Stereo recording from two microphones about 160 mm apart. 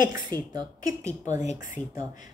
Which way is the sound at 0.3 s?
20° left (ahead or behind).